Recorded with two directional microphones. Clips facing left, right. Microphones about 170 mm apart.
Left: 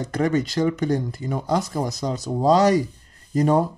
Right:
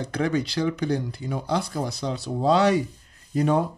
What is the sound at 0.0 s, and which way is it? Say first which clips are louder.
Speech: left 3 dB; 45° left (ahead or behind).